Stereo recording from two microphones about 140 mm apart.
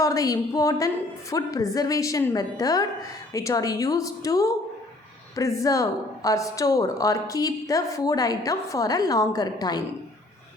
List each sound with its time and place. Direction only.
0.0 s a woman's voice: 25° left (ahead or behind)